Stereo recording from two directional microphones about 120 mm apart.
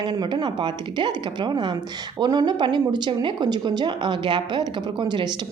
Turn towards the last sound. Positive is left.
turn(degrees=-40)  # may be behind; listen again after turning